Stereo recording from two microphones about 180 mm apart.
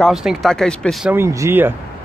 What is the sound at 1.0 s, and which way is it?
Speech, 15° right (ahead or behind).